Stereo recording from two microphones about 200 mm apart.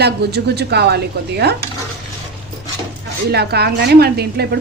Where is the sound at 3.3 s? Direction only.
55° right (ahead or behind).